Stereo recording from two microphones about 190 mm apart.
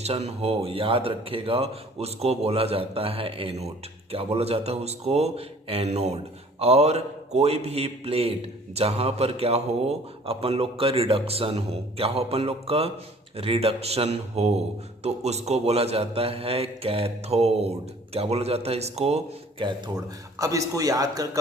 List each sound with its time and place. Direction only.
0.0 s speech: 30° right (ahead or behind)
20.4 s speech: 15° right (ahead or behind)